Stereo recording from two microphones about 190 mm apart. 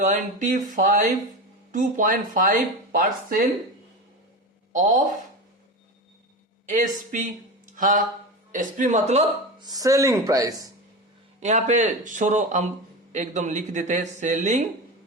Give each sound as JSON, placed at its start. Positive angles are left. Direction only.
{"t": 0.0, "sound": "speech", "side_deg": -40}
{"t": 4.7, "sound": "speech", "side_deg": -40}
{"t": 6.7, "sound": "speech", "side_deg": -40}
{"t": 9.6, "sound": "speech", "side_deg": -20}
{"t": 11.3, "sound": "speech", "side_deg": -40}